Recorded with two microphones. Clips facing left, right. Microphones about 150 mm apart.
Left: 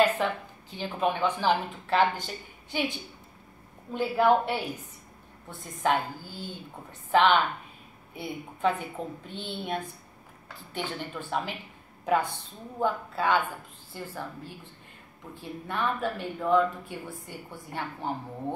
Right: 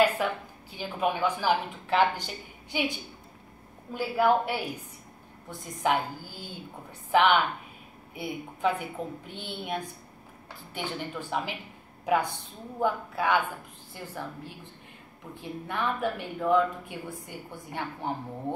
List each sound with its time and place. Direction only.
0.0 s speech: 10° right (ahead or behind)
3.9 s speech: 10° right (ahead or behind)